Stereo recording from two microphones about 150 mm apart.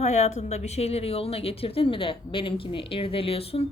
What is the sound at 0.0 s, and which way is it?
A woman's voice, 50° left (ahead or behind).